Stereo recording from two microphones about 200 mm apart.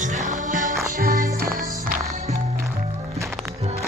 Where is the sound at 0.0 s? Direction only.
40° right (ahead or behind).